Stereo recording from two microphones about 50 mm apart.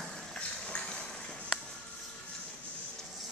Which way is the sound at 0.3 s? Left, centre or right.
Centre.